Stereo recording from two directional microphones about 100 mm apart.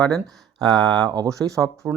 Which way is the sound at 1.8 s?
5° right (ahead or behind).